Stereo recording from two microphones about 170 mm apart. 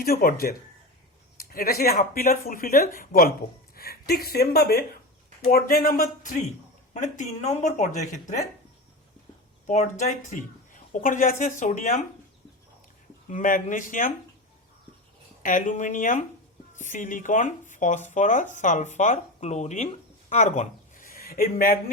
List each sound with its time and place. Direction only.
0.0 s speech: 60° left (ahead or behind)
9.6 s speech: 45° left (ahead or behind)
13.2 s speech: 50° left (ahead or behind)
15.4 s speech: 50° left (ahead or behind)